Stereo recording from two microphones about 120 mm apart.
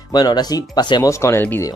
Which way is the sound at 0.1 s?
35° left (ahead or behind).